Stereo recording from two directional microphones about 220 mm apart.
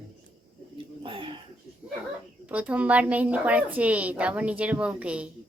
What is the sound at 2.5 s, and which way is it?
A woman's voice, 5° right (ahead or behind).